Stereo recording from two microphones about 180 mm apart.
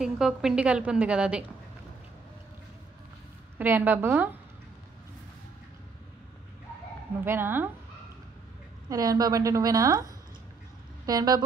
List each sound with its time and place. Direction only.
0.0 s a woman's voice: 5° right (ahead or behind)
3.5 s a woman's voice: 10° right (ahead or behind)
7.2 s a woman's voice: 10° right (ahead or behind)
8.8 s a woman's voice: 20° right (ahead or behind)
11.1 s a woman's voice: 20° right (ahead or behind)